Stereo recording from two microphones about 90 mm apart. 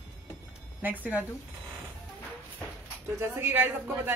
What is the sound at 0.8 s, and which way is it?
Speech, 20° right (ahead or behind).